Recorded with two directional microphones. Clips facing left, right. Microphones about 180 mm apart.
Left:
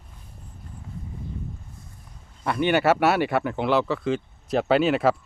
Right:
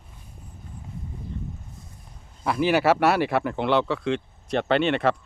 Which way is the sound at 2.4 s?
Centre (ahead or behind).